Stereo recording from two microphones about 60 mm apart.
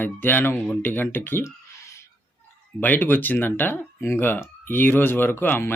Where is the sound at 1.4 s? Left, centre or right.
Left.